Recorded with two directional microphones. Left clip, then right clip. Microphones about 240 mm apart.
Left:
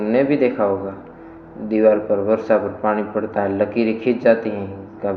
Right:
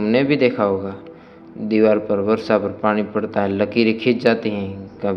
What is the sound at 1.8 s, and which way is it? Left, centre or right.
Speech, right.